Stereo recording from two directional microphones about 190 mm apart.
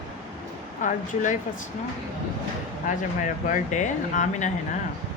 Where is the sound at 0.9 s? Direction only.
40° left (ahead or behind).